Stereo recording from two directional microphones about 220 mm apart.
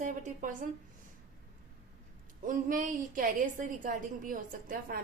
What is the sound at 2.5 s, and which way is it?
A woman's voice, 35° right (ahead or behind).